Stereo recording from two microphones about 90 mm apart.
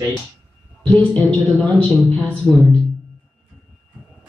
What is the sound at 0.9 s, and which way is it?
Speech, 15° left (ahead or behind).